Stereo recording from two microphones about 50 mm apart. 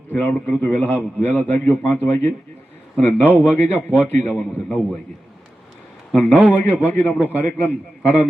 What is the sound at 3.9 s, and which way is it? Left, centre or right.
Speech, right.